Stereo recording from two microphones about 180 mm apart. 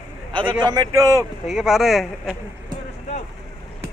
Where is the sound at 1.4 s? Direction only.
Centre (ahead or behind).